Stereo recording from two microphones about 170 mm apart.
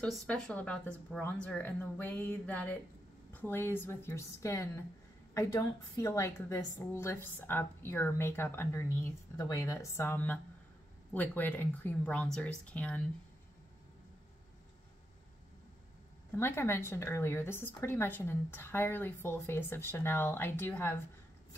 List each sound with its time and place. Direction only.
0.0 s a woman's voice: 5° left (ahead or behind)
16.3 s a woman's voice: 15° left (ahead or behind)